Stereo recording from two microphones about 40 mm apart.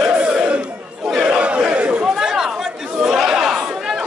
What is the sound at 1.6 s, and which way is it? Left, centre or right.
Chatter, right.